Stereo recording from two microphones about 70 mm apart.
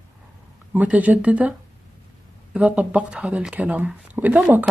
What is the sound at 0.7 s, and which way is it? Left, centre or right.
Speech, right.